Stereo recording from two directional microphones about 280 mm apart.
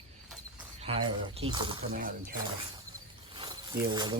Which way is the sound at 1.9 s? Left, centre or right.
Right.